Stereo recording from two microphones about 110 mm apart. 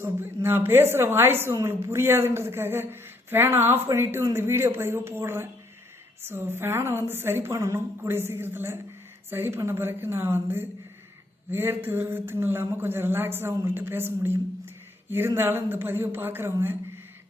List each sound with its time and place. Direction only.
0.0 s a woman's voice: 20° right (ahead or behind)